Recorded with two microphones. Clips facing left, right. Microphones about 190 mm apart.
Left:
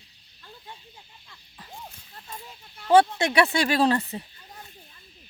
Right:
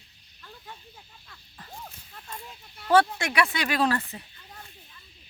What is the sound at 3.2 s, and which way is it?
Speech, 25° left (ahead or behind).